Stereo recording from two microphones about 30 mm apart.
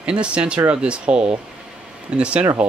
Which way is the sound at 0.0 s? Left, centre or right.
Right.